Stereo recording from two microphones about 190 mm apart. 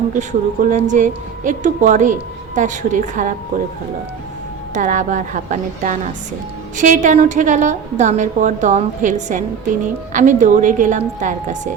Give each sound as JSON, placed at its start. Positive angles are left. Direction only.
{"t": 0.1, "sound": "a woman's voice", "side_deg": -40}
{"t": 4.7, "sound": "a woman's voice", "side_deg": -40}